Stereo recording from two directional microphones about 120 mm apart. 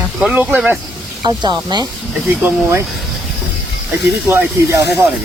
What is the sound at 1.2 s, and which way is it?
Speech, 35° right (ahead or behind).